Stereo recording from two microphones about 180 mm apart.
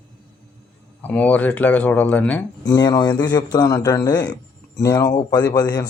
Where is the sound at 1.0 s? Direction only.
10° left (ahead or behind).